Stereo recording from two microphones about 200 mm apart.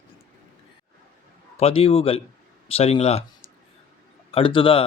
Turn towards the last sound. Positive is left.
turn(degrees=25)  # may be behind; listen again after turning